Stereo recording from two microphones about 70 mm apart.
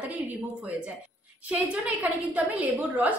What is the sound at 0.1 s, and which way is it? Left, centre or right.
A woman's voice, right.